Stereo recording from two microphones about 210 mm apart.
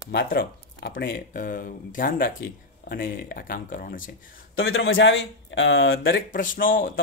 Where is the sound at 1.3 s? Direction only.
40° left (ahead or behind).